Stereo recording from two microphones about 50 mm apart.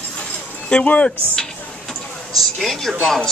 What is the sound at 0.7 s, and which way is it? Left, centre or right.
Speech, left.